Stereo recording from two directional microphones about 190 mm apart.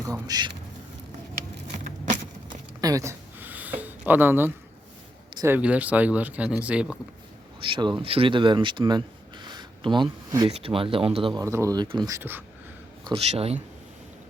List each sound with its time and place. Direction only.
0.1 s speech: 20° right (ahead or behind)
2.8 s a sound: 15° right (ahead or behind)
5.4 s speech: 10° right (ahead or behind)
7.6 s speech: 25° right (ahead or behind)
11.4 s speech: 15° right (ahead or behind)
13.1 s a man's voice: 30° right (ahead or behind)